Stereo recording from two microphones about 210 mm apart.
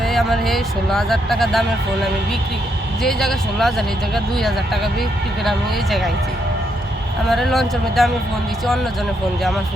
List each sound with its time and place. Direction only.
0.0 s speech: centre (ahead or behind)
7.3 s speech: centre (ahead or behind)